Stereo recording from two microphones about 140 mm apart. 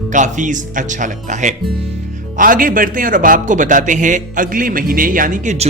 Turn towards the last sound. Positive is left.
turn(degrees=-70)  # may be behind; listen again after turning